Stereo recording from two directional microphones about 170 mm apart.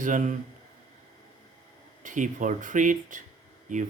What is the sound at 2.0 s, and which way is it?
Speech, 50° right (ahead or behind).